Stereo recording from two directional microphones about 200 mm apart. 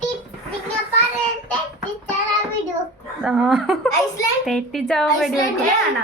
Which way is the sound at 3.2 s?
5° right (ahead or behind).